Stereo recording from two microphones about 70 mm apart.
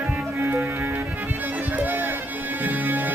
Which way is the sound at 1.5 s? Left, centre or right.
Right.